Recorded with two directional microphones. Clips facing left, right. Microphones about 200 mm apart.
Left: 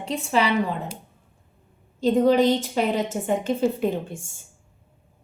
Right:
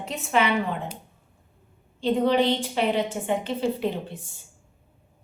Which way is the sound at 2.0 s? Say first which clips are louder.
Left 3 dB; 45° left (ahead or behind).